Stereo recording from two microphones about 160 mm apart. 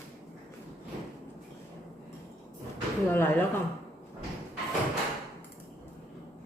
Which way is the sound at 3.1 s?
15° left (ahead or behind).